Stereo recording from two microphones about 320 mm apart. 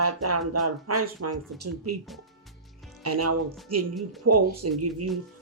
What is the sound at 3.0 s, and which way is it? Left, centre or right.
Speech, right.